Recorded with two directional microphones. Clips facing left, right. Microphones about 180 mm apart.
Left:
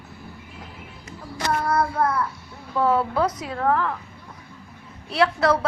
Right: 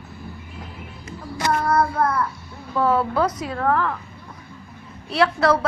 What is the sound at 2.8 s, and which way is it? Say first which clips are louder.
A woman's voice: right 1 dB; 20° left (ahead or behind).